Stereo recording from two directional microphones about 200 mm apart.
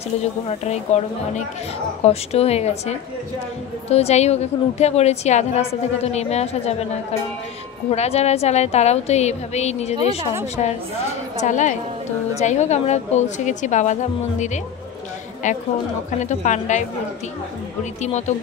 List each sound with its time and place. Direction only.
0.2 s a woman's voice: 35° left (ahead or behind)
7.9 s a woman's voice: 35° left (ahead or behind)
15.4 s a woman's voice: 40° left (ahead or behind)
18.0 s a woman's voice: 35° left (ahead or behind)